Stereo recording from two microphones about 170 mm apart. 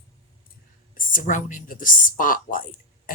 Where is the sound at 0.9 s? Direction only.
50° left (ahead or behind).